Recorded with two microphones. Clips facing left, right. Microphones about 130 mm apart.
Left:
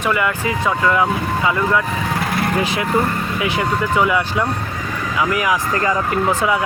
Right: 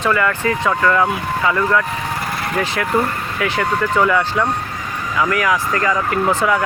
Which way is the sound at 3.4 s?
15° left (ahead or behind).